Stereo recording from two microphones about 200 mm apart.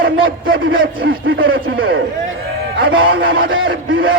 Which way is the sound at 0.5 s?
75° right (ahead or behind).